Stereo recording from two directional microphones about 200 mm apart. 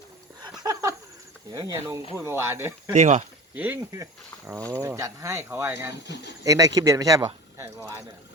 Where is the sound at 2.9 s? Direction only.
35° right (ahead or behind).